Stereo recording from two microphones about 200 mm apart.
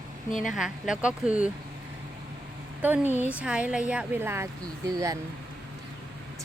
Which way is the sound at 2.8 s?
10° right (ahead or behind).